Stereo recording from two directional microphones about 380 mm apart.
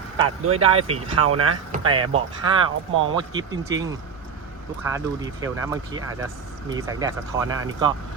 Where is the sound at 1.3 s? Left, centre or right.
Right.